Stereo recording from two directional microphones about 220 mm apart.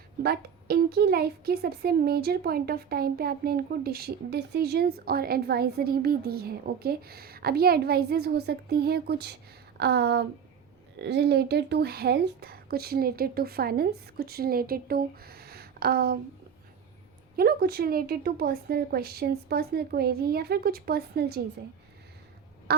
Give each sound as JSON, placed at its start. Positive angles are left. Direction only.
{"t": 0.2, "sound": "a woman's voice", "side_deg": -45}
{"t": 17.3, "sound": "a woman's voice", "side_deg": -45}